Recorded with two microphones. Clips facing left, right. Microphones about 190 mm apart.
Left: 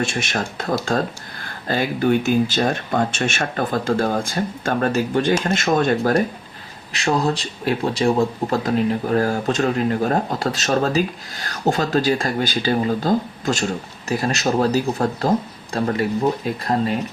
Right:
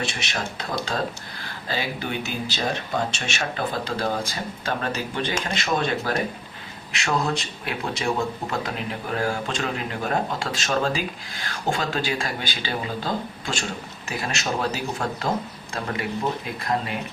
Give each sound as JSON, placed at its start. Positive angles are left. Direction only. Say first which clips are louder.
{"t": 0.0, "sound": "speech", "louder": "left 6 dB", "side_deg": 50}